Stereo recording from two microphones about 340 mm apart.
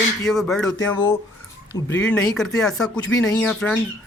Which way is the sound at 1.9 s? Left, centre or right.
Centre.